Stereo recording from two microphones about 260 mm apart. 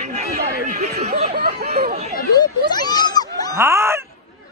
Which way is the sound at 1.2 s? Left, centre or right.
Right.